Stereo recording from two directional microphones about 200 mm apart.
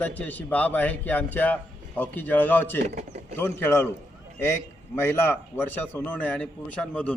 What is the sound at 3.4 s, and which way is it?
A man's voice, 10° left (ahead or behind).